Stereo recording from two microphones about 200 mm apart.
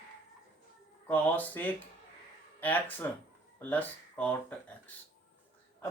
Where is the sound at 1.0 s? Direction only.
10° left (ahead or behind).